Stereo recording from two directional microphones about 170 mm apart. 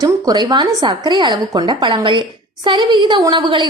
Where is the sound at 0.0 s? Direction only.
20° right (ahead or behind).